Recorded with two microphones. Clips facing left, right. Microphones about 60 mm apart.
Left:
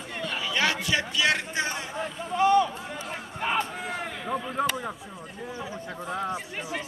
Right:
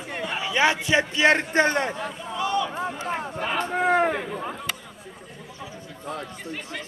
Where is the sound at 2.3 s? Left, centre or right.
Left.